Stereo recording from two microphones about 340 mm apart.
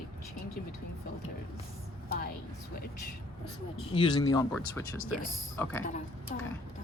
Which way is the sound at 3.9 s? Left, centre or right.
Centre.